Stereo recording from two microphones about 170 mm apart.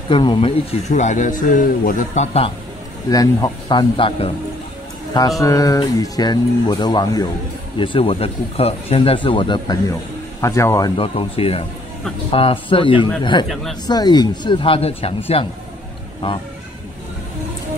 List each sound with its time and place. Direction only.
0.1 s speech: 30° left (ahead or behind)
3.1 s speech: 20° left (ahead or behind)
5.4 s speech: 20° left (ahead or behind)
11.0 s speech: 35° left (ahead or behind)